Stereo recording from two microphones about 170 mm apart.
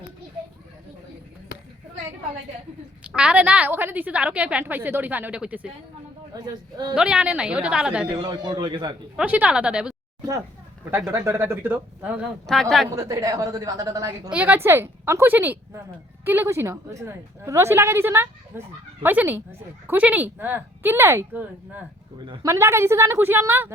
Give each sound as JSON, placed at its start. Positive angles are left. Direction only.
{"t": 3.0, "sound": "a woman's voice", "side_deg": -5}
{"t": 6.4, "sound": "speech", "side_deg": -25}
{"t": 6.9, "sound": "a woman's voice", "side_deg": -5}
{"t": 8.1, "sound": "speech", "side_deg": -25}
{"t": 9.1, "sound": "a woman's voice", "side_deg": -10}
{"t": 11.1, "sound": "a woman's voice", "side_deg": -15}
{"t": 12.5, "sound": "speech", "side_deg": 0}
{"t": 12.9, "sound": "speech", "side_deg": -20}
{"t": 14.3, "sound": "a woman's voice", "side_deg": -10}